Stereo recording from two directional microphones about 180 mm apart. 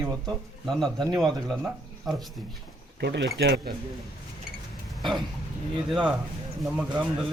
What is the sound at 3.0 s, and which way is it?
Speech, 75° right (ahead or behind).